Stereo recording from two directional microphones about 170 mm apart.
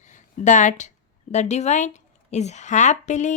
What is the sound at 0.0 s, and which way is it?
A woman's voice, 45° left (ahead or behind).